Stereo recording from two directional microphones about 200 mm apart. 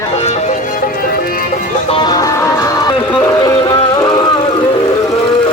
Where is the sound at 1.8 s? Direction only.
25° left (ahead or behind).